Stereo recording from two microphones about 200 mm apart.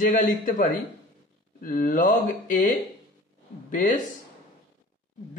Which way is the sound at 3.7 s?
40° left (ahead or behind).